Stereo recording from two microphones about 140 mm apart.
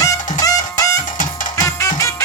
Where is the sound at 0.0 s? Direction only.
25° left (ahead or behind).